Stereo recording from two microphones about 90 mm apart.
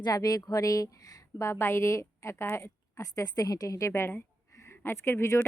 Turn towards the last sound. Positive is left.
turn(degrees=30)  # may be behind; listen again after turning